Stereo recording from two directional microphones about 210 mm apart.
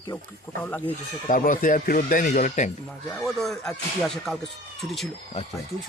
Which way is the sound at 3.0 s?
5° left (ahead or behind).